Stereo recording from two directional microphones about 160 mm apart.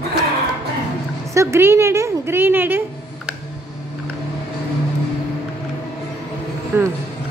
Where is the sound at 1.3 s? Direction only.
20° right (ahead or behind).